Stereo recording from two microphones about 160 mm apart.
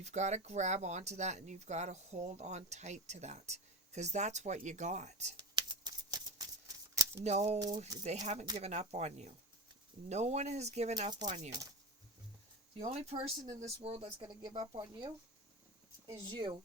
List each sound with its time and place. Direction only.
0.0 s speech: 45° right (ahead or behind)
5.4 s a sound: 25° right (ahead or behind)
6.9 s shuffling cards: 20° right (ahead or behind)
7.3 s speech: 45° right (ahead or behind)
11.1 s speech: 25° right (ahead or behind)
12.8 s speech: 40° right (ahead or behind); by 15.1 s 25° right (ahead or behind)
16.2 s speech: 25° right (ahead or behind)